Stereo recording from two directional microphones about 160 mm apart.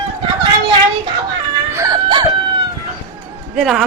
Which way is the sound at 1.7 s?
20° right (ahead or behind).